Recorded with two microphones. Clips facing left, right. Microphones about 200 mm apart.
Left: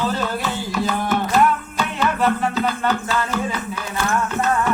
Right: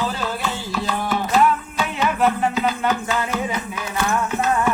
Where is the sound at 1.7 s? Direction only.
10° right (ahead or behind).